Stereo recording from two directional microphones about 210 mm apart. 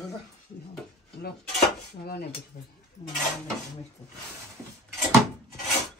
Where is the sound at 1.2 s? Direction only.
50° left (ahead or behind).